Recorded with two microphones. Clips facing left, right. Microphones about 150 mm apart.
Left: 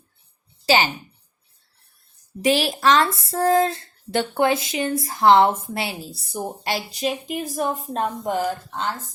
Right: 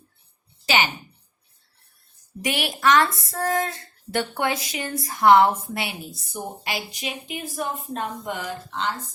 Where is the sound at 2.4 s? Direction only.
25° left (ahead or behind).